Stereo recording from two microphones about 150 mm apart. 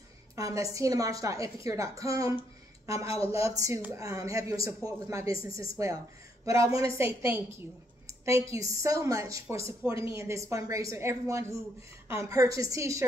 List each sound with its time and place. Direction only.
0.4 s a woman's voice: 20° right (ahead or behind)